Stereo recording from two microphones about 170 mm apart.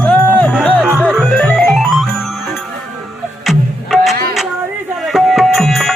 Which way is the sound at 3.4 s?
Centre (ahead or behind).